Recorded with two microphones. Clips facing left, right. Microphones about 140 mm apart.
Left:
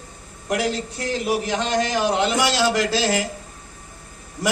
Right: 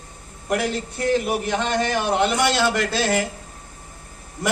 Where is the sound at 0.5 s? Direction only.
55° right (ahead or behind).